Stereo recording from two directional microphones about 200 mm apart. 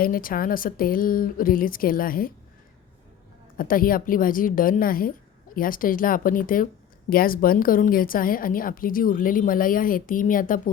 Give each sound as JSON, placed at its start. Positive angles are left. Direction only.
{"t": 0.0, "sound": "a woman's voice", "side_deg": 45}
{"t": 3.6, "sound": "a woman's voice", "side_deg": 45}